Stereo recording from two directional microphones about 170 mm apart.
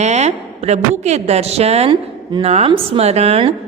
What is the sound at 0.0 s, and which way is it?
A woman's voice, 40° right (ahead or behind).